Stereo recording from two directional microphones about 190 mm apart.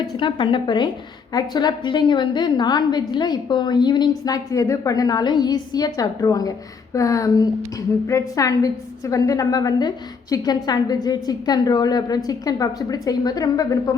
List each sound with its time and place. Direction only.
0.2 s a woman's voice: 25° left (ahead or behind)